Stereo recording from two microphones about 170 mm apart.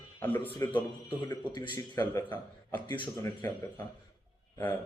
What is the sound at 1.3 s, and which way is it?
Speech, 25° left (ahead or behind).